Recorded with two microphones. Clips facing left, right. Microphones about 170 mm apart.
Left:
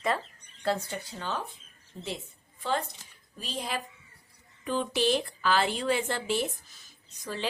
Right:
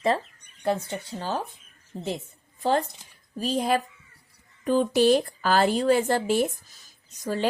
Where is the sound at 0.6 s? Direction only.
20° right (ahead or behind).